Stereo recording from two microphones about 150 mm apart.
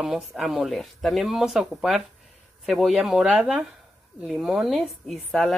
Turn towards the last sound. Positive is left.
turn(degrees=0)  # may be behind; listen again after turning